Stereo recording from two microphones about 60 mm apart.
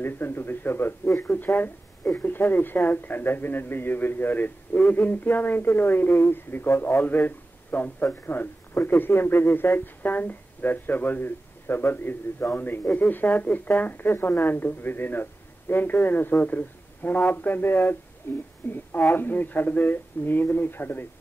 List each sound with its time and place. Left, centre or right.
0.0 s speech: left